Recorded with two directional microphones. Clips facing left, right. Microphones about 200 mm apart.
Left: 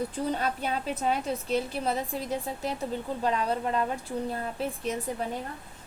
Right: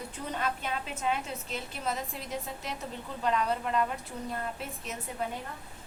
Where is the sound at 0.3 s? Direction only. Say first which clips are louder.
Left 3 dB; 35° left (ahead or behind).